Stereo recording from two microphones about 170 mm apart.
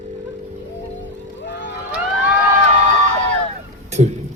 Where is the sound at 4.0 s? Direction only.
40° right (ahead or behind).